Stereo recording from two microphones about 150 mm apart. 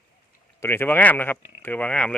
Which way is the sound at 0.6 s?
15° left (ahead or behind).